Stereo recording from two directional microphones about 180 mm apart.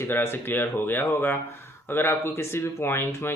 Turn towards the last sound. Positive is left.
turn(degrees=15)  # may be behind; listen again after turning